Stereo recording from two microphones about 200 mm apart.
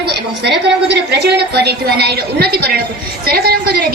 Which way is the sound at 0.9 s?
55° right (ahead or behind).